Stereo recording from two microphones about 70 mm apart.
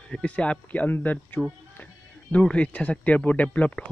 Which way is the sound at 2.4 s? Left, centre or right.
Centre.